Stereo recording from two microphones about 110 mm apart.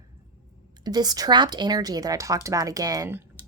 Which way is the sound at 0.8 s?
35° right (ahead or behind).